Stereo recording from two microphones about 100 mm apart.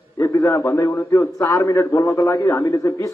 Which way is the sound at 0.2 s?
35° left (ahead or behind).